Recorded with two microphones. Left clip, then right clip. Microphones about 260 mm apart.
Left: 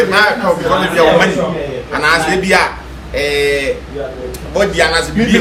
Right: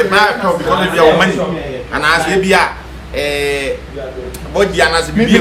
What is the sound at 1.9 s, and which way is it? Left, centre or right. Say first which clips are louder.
Speech: even; centre.